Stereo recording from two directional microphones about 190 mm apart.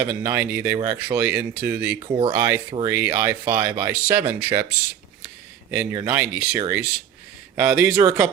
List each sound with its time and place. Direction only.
0.0 s speech: 10° right (ahead or behind)
2.0 s speech: 30° right (ahead or behind)
2.3 s speech: 15° right (ahead or behind)
5.7 s speech: 10° right (ahead or behind)